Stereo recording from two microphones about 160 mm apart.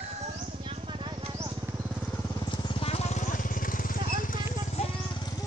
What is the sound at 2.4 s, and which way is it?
Vehicle, 35° left (ahead or behind).